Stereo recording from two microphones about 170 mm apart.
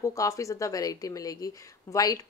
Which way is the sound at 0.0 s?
20° left (ahead or behind).